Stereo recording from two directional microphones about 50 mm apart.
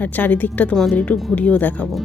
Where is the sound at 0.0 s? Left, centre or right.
Left.